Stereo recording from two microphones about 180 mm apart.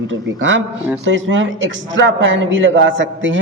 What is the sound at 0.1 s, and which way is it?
A man's voice, 90° right.